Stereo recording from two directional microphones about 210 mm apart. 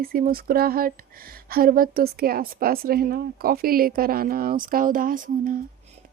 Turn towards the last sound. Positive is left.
turn(degrees=-40)  # may be behind; listen again after turning